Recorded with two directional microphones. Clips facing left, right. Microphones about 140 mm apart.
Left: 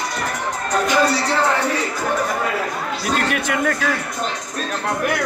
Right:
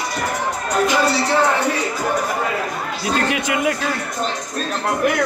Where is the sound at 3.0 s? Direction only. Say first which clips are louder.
Right 1 dB; 20° right (ahead or behind).